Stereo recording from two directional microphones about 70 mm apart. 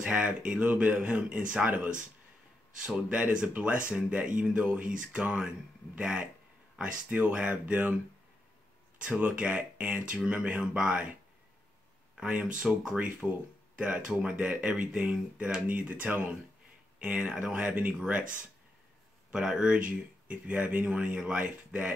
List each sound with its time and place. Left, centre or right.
0.0 s speech: centre
3.1 s speech: centre
9.0 s speech: centre
12.2 s speech: centre
19.3 s speech: centre